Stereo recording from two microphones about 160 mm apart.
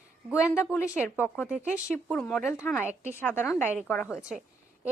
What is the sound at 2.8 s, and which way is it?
Speech, 10° right (ahead or behind).